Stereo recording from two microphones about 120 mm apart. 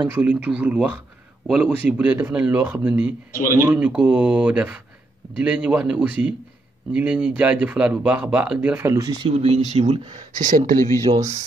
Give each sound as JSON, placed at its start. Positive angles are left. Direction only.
{"t": 0.1, "sound": "speech", "side_deg": -15}
{"t": 8.9, "sound": "speech", "side_deg": -30}
{"t": 9.3, "sound": "speech", "side_deg": -60}
{"t": 11.1, "sound": "speech", "side_deg": -55}